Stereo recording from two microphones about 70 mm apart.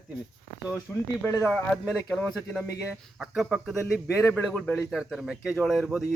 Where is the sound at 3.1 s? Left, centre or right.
Centre.